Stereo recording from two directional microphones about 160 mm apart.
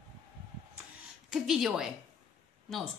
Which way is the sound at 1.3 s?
Centre (ahead or behind).